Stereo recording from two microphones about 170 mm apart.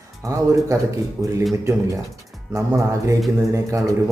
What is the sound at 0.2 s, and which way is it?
Speech, 20° right (ahead or behind).